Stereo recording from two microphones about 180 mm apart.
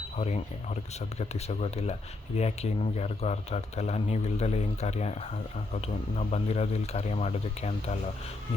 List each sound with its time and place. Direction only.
0.2 s speech: 40° left (ahead or behind)